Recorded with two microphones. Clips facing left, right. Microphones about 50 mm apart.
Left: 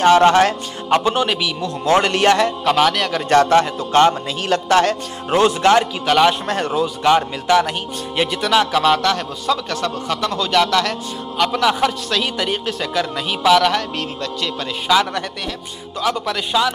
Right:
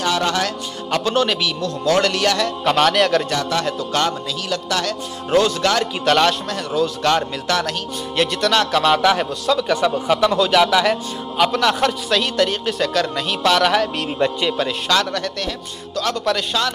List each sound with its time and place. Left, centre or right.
0.0 s a man's voice: left; by 1.7 s centre
1.9 s a man's voice: left
2.6 s a man's voice: centre
3.3 s a man's voice: left
6.0 s speech: centre
6.7 s a man's voice: centre
9.7 s a man's voice: centre
11.5 s a man's voice: centre
14.9 s speech: centre